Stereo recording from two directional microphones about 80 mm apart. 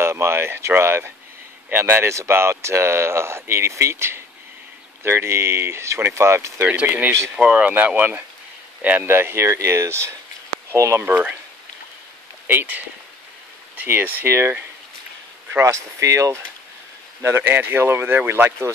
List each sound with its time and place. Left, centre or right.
0.0 s speech: right
7.3 s speech: centre; by 11.0 s right
11.0 s speech: right
12.4 s speech: right
15.6 s speech: right
17.2 s speech: right